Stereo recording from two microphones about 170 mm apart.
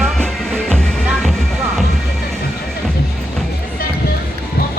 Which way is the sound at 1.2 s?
Centre (ahead or behind).